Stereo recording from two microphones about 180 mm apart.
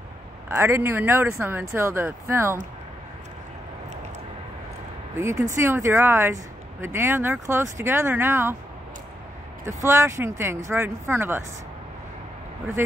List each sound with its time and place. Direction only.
0.5 s speech: 15° right (ahead or behind)
5.2 s speech: 15° right (ahead or behind)
9.7 s speech: 15° right (ahead or behind)